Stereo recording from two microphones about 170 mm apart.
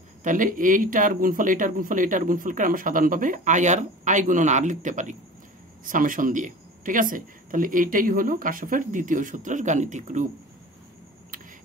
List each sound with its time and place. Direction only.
0.2 s speech: 50° right (ahead or behind)